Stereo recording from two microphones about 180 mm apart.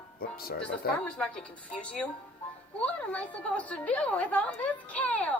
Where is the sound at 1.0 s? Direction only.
5° left (ahead or behind).